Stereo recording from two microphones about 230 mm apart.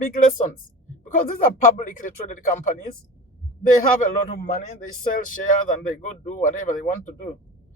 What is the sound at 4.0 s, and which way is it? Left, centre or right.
Speech, left.